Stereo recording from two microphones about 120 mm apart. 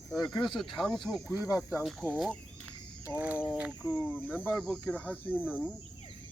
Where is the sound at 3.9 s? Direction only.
15° left (ahead or behind).